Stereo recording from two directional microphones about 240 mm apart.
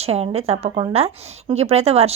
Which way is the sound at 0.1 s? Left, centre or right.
Right.